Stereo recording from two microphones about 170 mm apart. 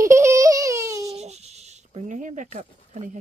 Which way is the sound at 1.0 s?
40° right (ahead or behind).